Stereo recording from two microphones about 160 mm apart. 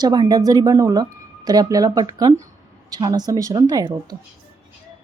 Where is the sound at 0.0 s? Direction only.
25° right (ahead or behind).